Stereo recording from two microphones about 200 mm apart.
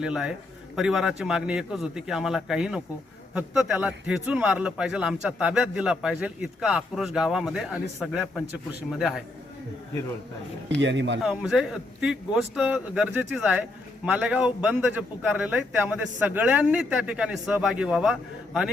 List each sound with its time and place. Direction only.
0.0 s a man's voice: 5° right (ahead or behind)
10.8 s speech: 65° right (ahead or behind)
11.2 s a man's voice: centre (ahead or behind)